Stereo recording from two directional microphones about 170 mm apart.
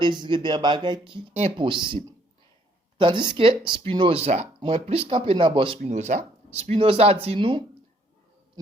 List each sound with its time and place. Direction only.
0.0 s speech: 25° right (ahead or behind)
3.0 s speech: 25° right (ahead or behind)
5.8 s speech: 45° right (ahead or behind)